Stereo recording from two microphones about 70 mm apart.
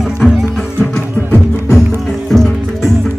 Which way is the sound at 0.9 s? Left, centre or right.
Left.